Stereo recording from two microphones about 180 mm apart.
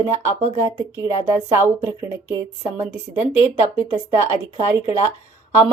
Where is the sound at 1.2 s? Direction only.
15° right (ahead or behind).